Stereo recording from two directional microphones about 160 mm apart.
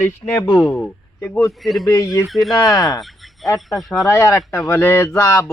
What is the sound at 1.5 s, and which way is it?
Speech, centre (ahead or behind).